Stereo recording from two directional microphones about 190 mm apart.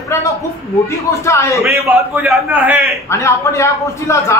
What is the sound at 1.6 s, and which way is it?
A man's voice, 10° right (ahead or behind).